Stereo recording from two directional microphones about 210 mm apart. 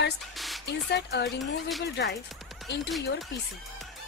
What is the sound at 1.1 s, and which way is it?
Speech, 55° left (ahead or behind).